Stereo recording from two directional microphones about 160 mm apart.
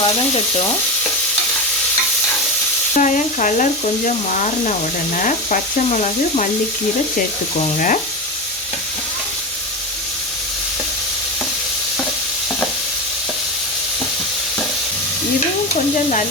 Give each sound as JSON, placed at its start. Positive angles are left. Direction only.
{"t": 0.0, "sound": "frying", "side_deg": 35}
{"t": 2.9, "sound": "frying", "side_deg": 50}
{"t": 5.1, "sound": "frying", "side_deg": 50}
{"t": 7.6, "sound": "sizzle", "side_deg": 55}